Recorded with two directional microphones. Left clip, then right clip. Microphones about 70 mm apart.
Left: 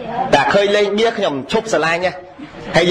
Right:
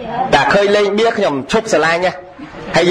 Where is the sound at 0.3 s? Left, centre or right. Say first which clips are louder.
Right 2 dB; right.